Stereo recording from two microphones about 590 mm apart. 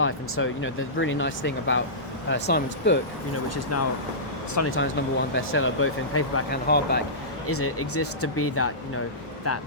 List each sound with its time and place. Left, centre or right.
0.0 s speech: centre